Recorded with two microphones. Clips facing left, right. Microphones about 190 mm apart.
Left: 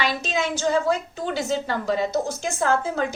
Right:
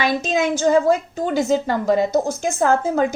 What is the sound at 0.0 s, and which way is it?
A woman's voice, 45° right (ahead or behind).